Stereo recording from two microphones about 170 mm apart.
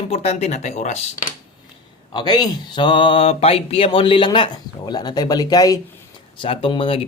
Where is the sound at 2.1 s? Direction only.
25° left (ahead or behind).